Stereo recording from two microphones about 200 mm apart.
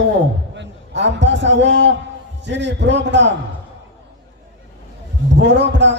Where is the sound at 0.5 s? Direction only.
60° right (ahead or behind).